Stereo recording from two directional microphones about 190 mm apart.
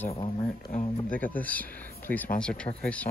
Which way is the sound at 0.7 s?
40° left (ahead or behind).